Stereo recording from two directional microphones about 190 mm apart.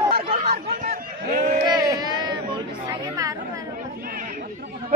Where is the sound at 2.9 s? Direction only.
20° right (ahead or behind).